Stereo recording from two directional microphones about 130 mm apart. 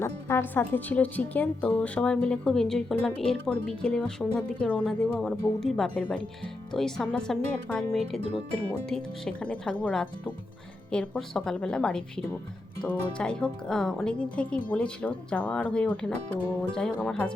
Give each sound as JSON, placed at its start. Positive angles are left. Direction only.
{"t": 0.0, "sound": "speech", "side_deg": 20}